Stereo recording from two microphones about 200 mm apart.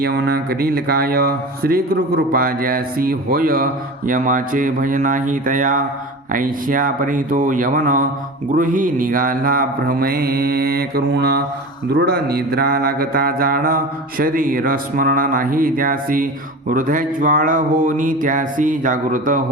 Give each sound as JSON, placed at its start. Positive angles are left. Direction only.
{"t": 0.0, "sound": "speech", "side_deg": -50}
{"t": 6.3, "sound": "mantra", "side_deg": -40}
{"t": 8.5, "sound": "speech", "side_deg": -40}
{"t": 16.6, "sound": "mantra", "side_deg": -40}